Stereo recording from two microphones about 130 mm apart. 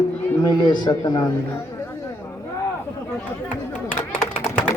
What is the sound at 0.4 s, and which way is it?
Speech, 30° left (ahead or behind).